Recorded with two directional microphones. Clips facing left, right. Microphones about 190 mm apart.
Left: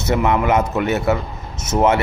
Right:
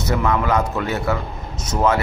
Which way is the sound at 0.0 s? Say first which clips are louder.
Left 3 dB; 25° left (ahead or behind).